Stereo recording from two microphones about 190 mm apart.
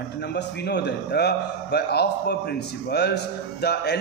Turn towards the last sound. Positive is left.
turn(degrees=60)  # may be behind; listen again after turning